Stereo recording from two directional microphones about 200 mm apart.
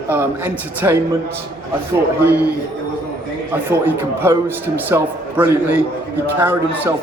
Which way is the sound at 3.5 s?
10° right (ahead or behind).